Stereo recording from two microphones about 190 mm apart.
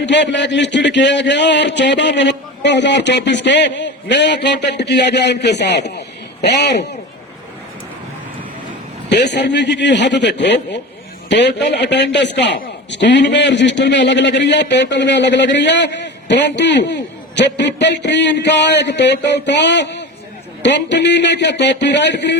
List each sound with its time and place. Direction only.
0.0 s a man's voice: 70° left (ahead or behind)
9.0 s a man's voice: 65° left (ahead or behind)